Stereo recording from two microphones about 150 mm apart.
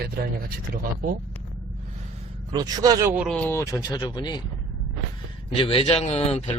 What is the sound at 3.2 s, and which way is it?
Speech, 10° left (ahead or behind).